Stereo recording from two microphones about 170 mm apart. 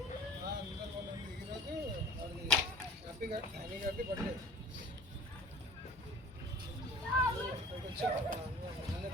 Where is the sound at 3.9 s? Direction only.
60° right (ahead or behind).